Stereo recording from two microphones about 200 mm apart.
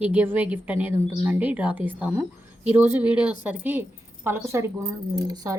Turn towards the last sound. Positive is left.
turn(degrees=-15)  # may be behind; listen again after turning